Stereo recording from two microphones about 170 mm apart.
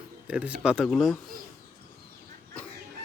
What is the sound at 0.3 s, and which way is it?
Speech, 5° right (ahead or behind).